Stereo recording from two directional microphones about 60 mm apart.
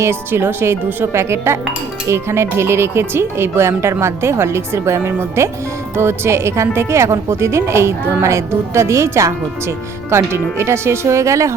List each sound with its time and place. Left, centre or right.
0.0 s a woman's voice: right